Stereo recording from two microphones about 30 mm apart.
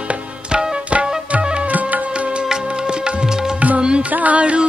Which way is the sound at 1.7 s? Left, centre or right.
Right.